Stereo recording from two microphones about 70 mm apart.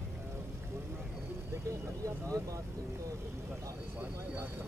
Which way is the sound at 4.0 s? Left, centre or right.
Right.